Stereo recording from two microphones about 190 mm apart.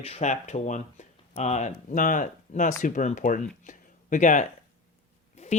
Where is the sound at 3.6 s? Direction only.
40° left (ahead or behind).